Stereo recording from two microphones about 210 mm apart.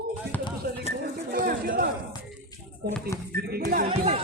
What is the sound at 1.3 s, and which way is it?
Chatter, 45° right (ahead or behind).